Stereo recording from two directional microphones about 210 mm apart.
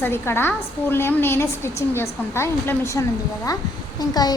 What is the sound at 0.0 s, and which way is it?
A woman's voice, 10° left (ahead or behind).